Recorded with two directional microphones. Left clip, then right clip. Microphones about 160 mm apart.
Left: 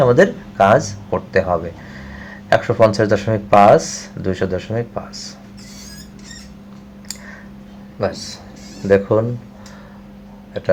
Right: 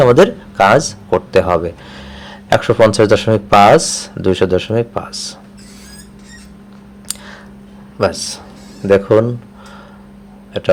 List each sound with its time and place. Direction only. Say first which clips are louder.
0.0 s speech: right 4 dB; 25° right (ahead or behind)
7.9 s speech: right 6 dB; 25° right (ahead or behind)